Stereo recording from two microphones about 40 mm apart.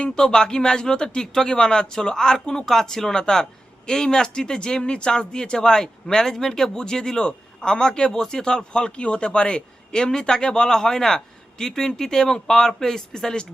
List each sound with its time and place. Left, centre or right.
0.2 s speech: centre